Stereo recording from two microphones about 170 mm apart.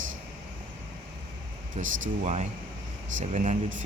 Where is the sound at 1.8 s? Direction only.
40° right (ahead or behind).